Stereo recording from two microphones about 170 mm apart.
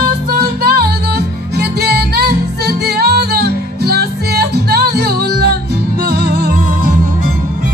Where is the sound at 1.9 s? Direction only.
65° right (ahead or behind).